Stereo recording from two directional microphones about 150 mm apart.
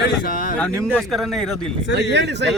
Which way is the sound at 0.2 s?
70° left (ahead or behind).